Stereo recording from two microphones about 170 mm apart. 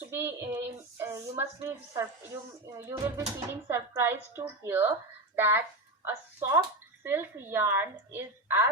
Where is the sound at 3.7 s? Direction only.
15° right (ahead or behind).